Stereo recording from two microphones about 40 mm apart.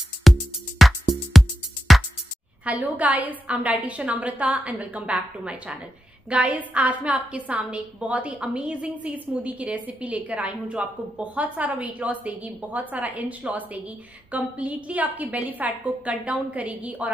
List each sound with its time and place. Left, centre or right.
0.2 s music: centre
2.6 s a woman's voice: right
5.0 s a woman's voice: right
6.5 s a woman's voice: right
8.9 s a woman's voice: right